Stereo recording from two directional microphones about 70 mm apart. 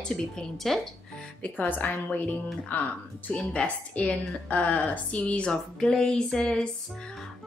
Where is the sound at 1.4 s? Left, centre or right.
Left.